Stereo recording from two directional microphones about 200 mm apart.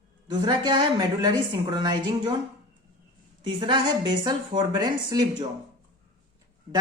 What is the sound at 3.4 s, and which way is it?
A woman's voice, 25° right (ahead or behind).